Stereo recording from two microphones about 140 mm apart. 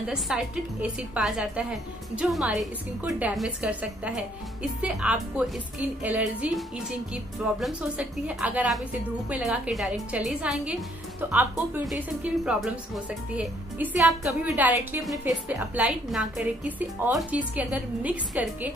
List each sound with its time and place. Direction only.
0.0 s a woman's voice: 5° right (ahead or behind)
7.6 s a woman's voice: 5° right (ahead or behind)
14.5 s a woman's voice: 15° right (ahead or behind)